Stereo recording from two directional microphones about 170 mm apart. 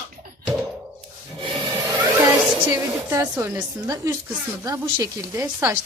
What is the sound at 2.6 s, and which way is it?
Speech, 15° right (ahead or behind).